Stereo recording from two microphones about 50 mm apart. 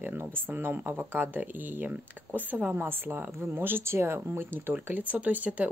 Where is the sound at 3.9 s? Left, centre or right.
Right.